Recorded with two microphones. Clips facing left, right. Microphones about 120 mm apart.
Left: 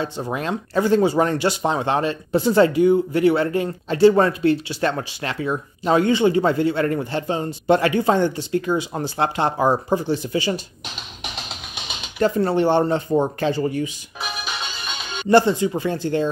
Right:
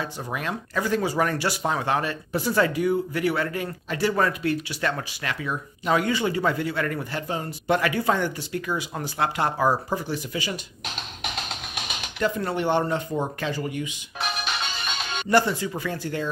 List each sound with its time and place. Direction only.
0.0 s speech: 25° left (ahead or behind)
11.0 s music: centre (ahead or behind)
12.2 s speech: 30° left (ahead or behind)
14.2 s music: centre (ahead or behind)
15.2 s speech: 25° left (ahead or behind)